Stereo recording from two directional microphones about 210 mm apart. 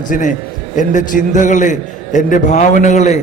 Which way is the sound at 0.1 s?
35° left (ahead or behind).